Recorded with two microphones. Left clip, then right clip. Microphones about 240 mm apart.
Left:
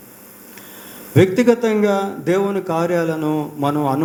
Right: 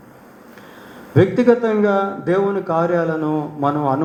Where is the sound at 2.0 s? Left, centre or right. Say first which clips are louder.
Right 1 dB; left.